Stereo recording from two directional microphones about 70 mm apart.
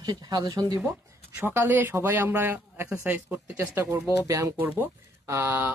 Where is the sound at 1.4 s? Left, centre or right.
Right.